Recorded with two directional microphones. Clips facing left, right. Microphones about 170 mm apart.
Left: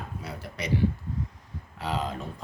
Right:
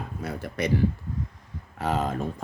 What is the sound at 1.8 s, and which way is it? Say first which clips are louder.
Speech: right 4 dB; 50° right (ahead or behind).